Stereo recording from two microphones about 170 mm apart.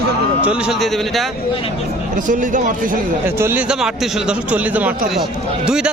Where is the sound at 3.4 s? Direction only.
10° right (ahead or behind).